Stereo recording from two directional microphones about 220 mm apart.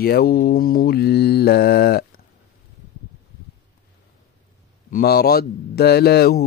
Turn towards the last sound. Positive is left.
turn(degrees=45)  # may be behind; listen again after turning